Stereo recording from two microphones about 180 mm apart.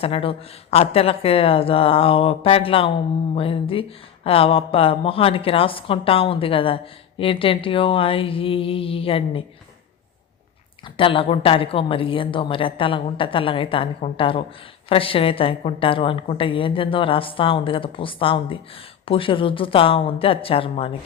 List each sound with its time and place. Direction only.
0.0 s speech: 30° left (ahead or behind)
10.9 s a woman's voice: 30° left (ahead or behind)